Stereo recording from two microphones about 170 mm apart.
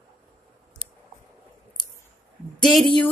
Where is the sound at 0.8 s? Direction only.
30° right (ahead or behind).